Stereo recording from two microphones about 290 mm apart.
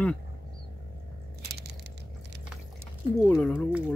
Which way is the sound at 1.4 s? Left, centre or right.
Right.